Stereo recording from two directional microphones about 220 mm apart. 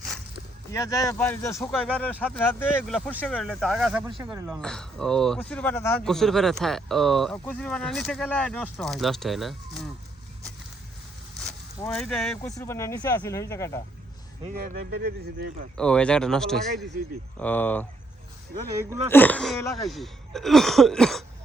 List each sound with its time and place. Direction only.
0.7 s speech: 15° left (ahead or behind); by 4.6 s 5° right (ahead or behind)
4.6 s speech: 5° left (ahead or behind)
11.8 s speech: 5° left (ahead or behind)
12.5 s speech: 15° left (ahead or behind)
14.5 s speech: 45° right (ahead or behind)
15.8 s speech: 5° left (ahead or behind)
19.1 s speech: 5° left (ahead or behind)